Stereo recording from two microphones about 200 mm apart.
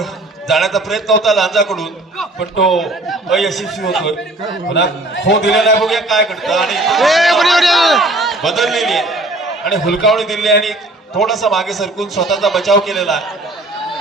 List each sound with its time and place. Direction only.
0.0 s a man's voice: centre (ahead or behind)
4.7 s a man's voice: 65° left (ahead or behind)
5.5 s a man's voice: centre (ahead or behind)